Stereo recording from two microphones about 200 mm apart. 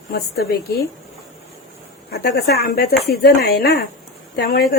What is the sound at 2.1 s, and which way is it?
Speech, 55° left (ahead or behind).